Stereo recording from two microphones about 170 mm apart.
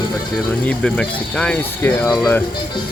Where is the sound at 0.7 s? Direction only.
5° left (ahead or behind).